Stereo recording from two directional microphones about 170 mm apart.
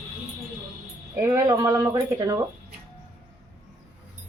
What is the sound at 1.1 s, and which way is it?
Speech, 15° right (ahead or behind).